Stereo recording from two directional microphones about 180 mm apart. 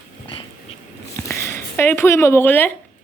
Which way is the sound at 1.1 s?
15° left (ahead or behind).